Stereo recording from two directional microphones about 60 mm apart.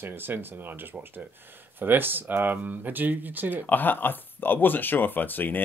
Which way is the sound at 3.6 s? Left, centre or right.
Left.